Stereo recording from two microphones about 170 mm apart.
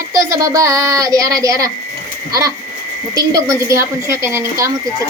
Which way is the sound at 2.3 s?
20° right (ahead or behind).